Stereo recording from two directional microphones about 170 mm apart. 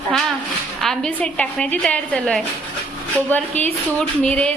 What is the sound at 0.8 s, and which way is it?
A woman's voice, 5° left (ahead or behind).